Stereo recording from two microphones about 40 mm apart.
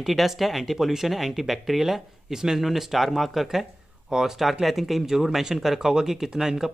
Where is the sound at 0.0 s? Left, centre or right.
Centre.